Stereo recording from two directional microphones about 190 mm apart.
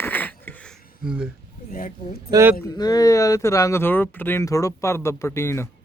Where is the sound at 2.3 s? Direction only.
15° right (ahead or behind).